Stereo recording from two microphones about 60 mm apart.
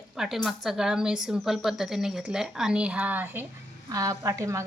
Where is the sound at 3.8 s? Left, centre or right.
Right.